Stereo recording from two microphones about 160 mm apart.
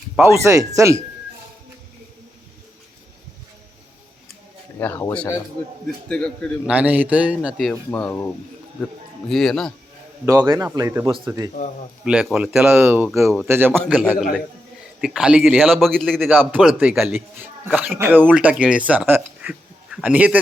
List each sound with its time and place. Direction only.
0.2 s a man's voice: 15° right (ahead or behind)
4.8 s a man's voice: 15° left (ahead or behind)
6.7 s a man's voice: 10° right (ahead or behind)
7.7 s speech: 10° left (ahead or behind)
9.3 s a man's voice: centre (ahead or behind)
10.2 s a man's voice: 25° right (ahead or behind)
12.0 s a man's voice: 5° right (ahead or behind)
12.6 s a man's voice: 15° right (ahead or behind)
15.0 s a man's voice: 5° right (ahead or behind)
16.3 s a man's voice: 10° right (ahead or behind)